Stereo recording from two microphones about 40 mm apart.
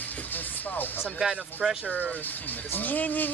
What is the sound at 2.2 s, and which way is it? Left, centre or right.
Speech, left.